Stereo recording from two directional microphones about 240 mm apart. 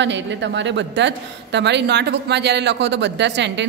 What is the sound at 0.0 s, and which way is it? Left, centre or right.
A woman's voice, right.